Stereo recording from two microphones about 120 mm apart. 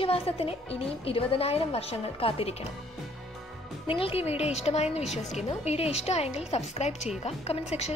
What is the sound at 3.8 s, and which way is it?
A woman's voice, 50° left (ahead or behind).